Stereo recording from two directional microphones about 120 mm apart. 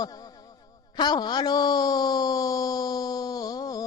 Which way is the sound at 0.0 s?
35° left (ahead or behind).